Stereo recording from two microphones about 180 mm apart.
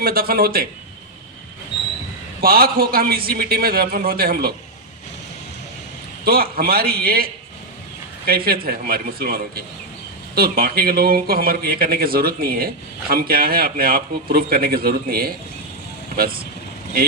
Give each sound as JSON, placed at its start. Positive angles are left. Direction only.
{"t": 0.0, "sound": "speech", "side_deg": -55}
{"t": 2.4, "sound": "speech", "side_deg": -55}
{"t": 6.2, "sound": "speech", "side_deg": -55}
{"t": 8.3, "sound": "speech", "side_deg": -55}